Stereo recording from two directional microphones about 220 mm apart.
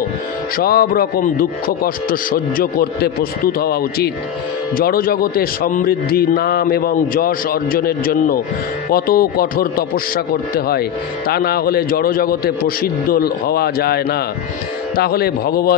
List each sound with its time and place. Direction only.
0.6 s a man's voice: 45° left (ahead or behind)